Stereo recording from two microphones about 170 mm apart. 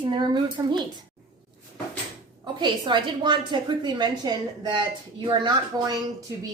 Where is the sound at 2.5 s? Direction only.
25° right (ahead or behind).